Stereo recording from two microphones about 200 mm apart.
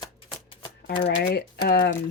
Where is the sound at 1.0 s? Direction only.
55° left (ahead or behind).